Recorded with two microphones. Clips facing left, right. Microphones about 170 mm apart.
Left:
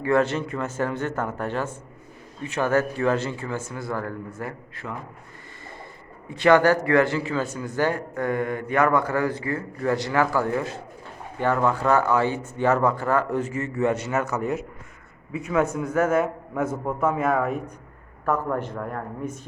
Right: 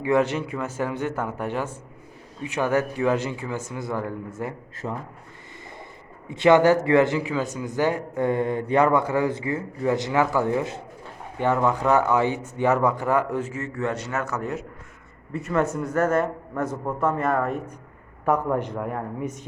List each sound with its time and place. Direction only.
0.0 s a man's voice: 15° right (ahead or behind)
6.2 s a man's voice: 20° right (ahead or behind); by 17.6 s centre (ahead or behind)
18.3 s speech: 15° right (ahead or behind)